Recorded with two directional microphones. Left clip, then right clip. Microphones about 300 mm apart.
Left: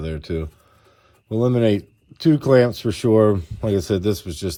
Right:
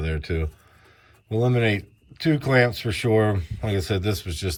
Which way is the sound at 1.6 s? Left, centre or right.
Centre.